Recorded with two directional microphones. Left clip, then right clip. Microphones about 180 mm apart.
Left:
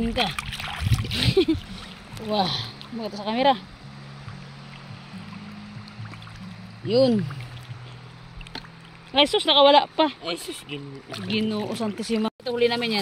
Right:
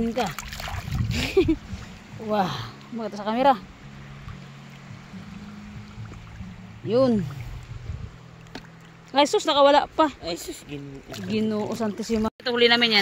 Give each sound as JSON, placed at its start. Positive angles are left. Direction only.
{"t": 0.2, "sound": "speech", "side_deg": -45}
{"t": 1.1, "sound": "speech", "side_deg": -10}
{"t": 6.9, "sound": "speech", "side_deg": -5}
{"t": 9.1, "sound": "speech", "side_deg": -10}
{"t": 10.2, "sound": "speech", "side_deg": -25}
{"t": 11.2, "sound": "speech", "side_deg": -10}
{"t": 12.4, "sound": "speech", "side_deg": 0}